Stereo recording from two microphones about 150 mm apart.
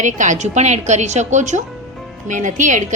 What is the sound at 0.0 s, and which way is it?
A woman's voice, 55° right (ahead or behind).